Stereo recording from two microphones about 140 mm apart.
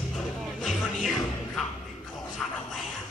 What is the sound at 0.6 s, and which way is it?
Music, centre (ahead or behind).